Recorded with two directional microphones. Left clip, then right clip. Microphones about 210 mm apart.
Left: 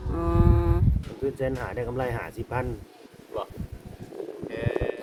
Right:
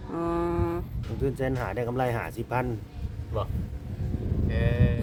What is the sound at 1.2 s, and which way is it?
Speech, 50° right (ahead or behind).